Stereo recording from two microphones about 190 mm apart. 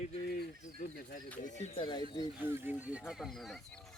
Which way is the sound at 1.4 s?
40° left (ahead or behind).